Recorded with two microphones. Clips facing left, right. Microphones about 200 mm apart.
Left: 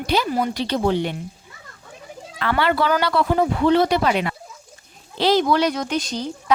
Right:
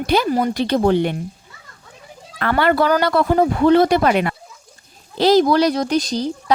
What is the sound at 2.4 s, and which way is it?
Speech, 50° right (ahead or behind).